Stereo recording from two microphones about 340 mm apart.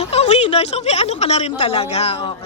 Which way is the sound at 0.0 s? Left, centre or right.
Centre.